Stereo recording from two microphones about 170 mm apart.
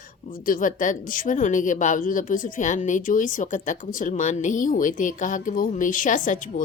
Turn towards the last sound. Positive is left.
turn(degrees=45)  # may be behind; listen again after turning